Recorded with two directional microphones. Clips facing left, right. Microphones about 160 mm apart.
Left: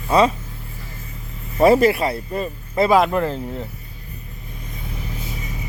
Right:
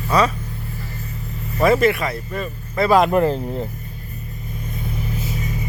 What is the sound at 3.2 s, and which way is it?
Speech, 35° right (ahead or behind).